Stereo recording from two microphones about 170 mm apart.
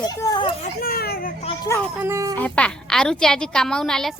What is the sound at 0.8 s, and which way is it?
Speech, 60° left (ahead or behind).